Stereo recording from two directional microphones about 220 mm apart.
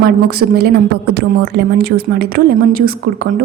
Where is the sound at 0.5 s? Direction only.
45° right (ahead or behind).